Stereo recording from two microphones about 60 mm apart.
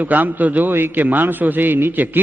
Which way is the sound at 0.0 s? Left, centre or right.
Right.